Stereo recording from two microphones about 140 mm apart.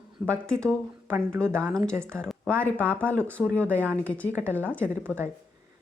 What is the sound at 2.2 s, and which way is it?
Speech, 5° left (ahead or behind).